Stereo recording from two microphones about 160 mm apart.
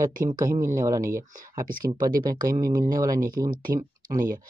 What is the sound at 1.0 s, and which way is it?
Speech, 60° right (ahead or behind).